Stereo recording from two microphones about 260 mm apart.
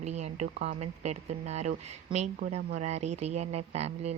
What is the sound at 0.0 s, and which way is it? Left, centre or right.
Speech, right.